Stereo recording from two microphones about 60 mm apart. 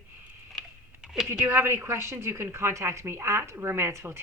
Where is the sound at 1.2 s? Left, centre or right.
Right.